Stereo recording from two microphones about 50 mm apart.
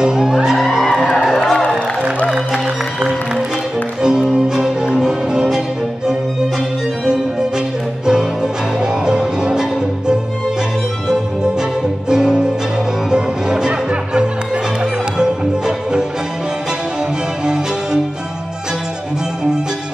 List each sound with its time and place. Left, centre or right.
0.0 s music: centre
1.5 s music: centre
4.0 s music: centre
7.1 s music: centre